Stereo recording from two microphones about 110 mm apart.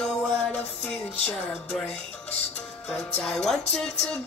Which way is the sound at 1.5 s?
15° left (ahead or behind).